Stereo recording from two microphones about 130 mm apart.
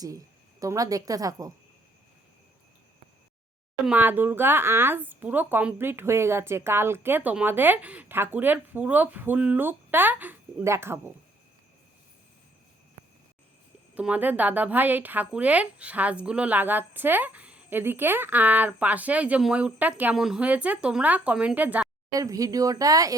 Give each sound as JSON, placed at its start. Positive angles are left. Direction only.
{"t": 0.6, "sound": "speech", "side_deg": -25}
{"t": 3.8, "sound": "a woman's voice", "side_deg": -15}
{"t": 13.9, "sound": "a woman's voice", "side_deg": -10}
{"t": 22.1, "sound": "speech", "side_deg": -25}